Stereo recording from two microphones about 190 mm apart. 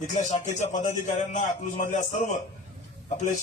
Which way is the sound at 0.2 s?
40° left (ahead or behind).